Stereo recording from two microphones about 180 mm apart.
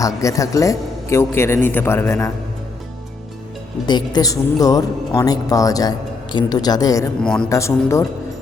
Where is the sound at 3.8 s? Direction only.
25° left (ahead or behind).